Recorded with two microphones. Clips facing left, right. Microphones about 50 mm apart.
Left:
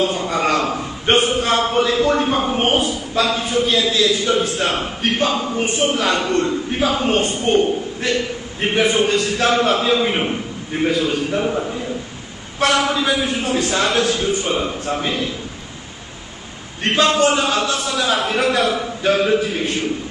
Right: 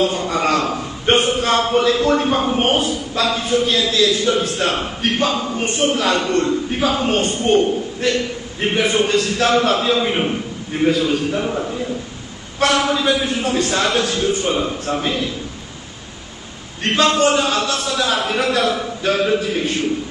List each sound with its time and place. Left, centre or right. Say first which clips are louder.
0.0 s a man's voice: right 1 dB; centre
16.8 s a man's voice: even; centre